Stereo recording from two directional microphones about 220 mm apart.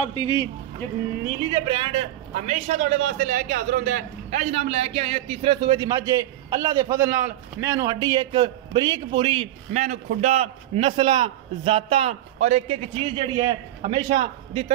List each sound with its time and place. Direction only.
0.0 s a man's voice: 20° left (ahead or behind)
1.5 s a man's voice: 20° right (ahead or behind)